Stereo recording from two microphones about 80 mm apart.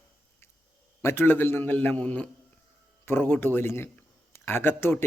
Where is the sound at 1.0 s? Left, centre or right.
Left.